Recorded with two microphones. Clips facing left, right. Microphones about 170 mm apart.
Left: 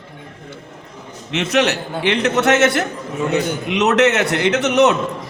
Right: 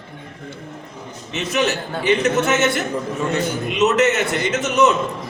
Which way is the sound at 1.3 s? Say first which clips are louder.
Left 3 dB; 70° left (ahead or behind).